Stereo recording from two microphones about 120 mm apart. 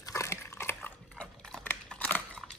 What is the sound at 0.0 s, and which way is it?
Dog, 25° left (ahead or behind).